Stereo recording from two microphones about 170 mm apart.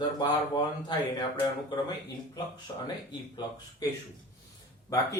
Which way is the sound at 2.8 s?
25° left (ahead or behind).